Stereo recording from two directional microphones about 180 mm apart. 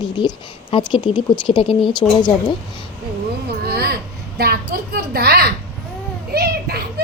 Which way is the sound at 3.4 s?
60° right (ahead or behind).